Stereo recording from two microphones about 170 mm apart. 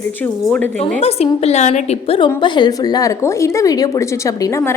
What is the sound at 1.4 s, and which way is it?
A woman's voice, 40° left (ahead or behind).